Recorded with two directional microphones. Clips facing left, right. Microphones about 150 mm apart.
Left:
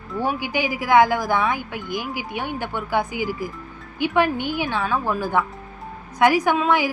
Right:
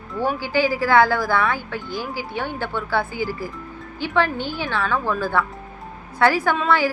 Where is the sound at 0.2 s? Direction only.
15° left (ahead or behind).